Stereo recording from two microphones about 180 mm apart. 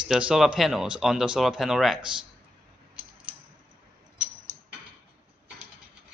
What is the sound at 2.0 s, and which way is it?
Speech, 25° right (ahead or behind).